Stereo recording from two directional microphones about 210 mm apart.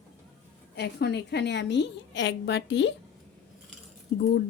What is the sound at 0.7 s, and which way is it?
A woman's voice, 55° left (ahead or behind).